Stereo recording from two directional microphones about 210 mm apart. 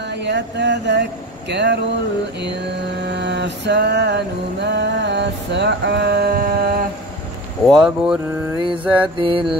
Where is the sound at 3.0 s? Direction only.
55° right (ahead or behind).